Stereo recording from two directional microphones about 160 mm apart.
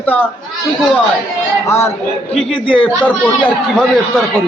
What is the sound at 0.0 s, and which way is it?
Speech, 10° left (ahead or behind).